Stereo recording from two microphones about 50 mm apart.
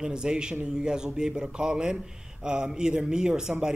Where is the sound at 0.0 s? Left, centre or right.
Centre.